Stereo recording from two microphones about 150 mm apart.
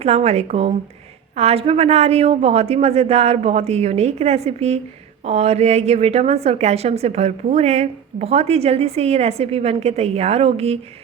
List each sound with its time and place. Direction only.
0.0 s a woman's voice: 45° right (ahead or behind)